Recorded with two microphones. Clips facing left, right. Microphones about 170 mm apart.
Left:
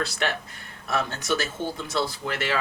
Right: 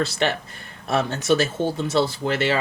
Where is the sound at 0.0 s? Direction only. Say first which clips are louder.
Right 5 dB; 25° right (ahead or behind).